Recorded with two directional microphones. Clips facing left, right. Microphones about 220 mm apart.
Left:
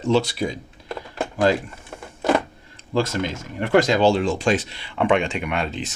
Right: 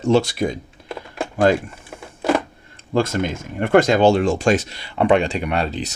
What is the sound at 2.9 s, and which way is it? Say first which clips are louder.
Speech: right 3 dB; 50° right (ahead or behind).